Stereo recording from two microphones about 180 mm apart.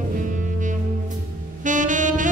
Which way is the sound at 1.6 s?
45° right (ahead or behind).